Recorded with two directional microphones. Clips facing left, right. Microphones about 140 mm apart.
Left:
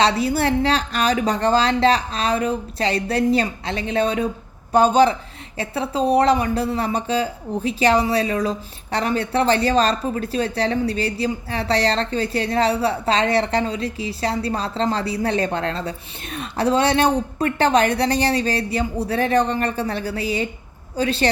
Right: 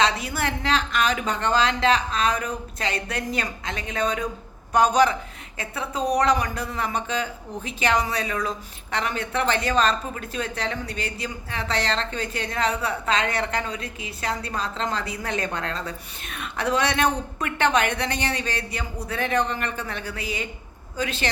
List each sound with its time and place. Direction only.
0.0 s speech: 30° left (ahead or behind)